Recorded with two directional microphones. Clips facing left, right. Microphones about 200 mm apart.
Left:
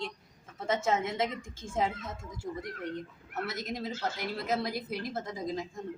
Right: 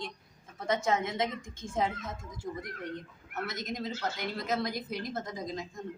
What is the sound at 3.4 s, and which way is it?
Speech, 30° left (ahead or behind).